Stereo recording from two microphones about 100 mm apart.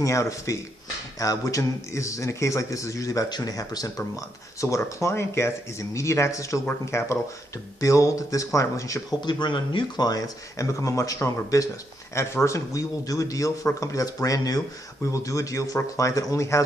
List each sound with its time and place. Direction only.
0.0 s speech: 30° left (ahead or behind)
9.2 s speech: 50° left (ahead or behind); by 16.6 s 30° left (ahead or behind)